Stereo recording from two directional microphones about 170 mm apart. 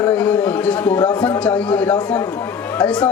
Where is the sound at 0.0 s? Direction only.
10° left (ahead or behind).